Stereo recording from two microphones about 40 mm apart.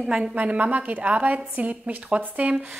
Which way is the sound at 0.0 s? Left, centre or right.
Centre.